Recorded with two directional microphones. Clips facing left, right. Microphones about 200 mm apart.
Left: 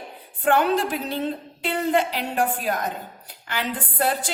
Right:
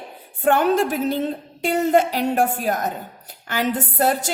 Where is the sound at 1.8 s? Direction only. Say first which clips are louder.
Right 4 dB; 45° right (ahead or behind).